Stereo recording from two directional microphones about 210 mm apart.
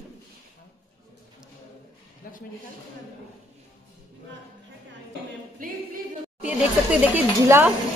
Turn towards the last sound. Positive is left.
turn(degrees=-10)  # may be behind; listen again after turning